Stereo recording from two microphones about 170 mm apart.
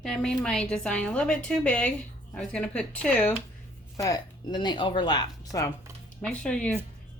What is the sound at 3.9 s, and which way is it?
Speech, 20° left (ahead or behind).